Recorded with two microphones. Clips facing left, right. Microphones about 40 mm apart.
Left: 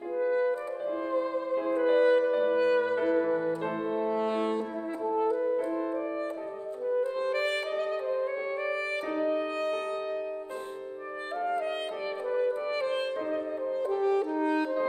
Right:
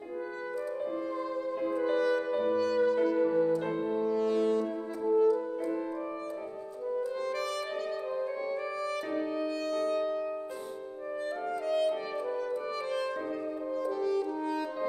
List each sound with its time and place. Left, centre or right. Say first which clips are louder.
0.2 s music: left 10 dB; left
2.2 s music: left 4 dB; centre
2.5 s music: left 2 dB; left
3.9 s french horn: even; left
6.9 s music: left 4 dB; left
11.4 s music: right 2 dB; left
13.8 s french horn: left 4 dB; left